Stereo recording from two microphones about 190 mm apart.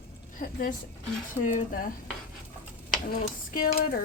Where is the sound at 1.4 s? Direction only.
40° left (ahead or behind).